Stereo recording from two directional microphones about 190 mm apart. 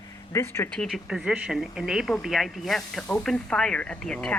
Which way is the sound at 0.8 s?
Centre (ahead or behind).